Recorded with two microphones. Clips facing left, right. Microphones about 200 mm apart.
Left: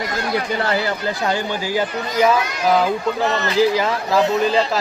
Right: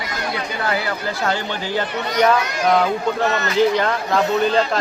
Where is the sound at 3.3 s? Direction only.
30° left (ahead or behind).